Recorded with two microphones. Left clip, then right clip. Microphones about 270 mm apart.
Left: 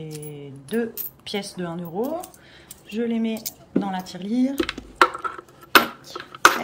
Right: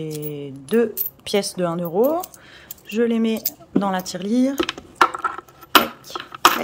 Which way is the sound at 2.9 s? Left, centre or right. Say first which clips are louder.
Right 6 dB; centre.